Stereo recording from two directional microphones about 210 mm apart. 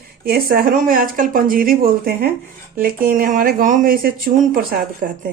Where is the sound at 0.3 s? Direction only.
45° right (ahead or behind).